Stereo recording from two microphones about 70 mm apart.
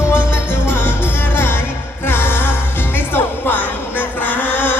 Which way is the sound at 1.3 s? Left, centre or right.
Left.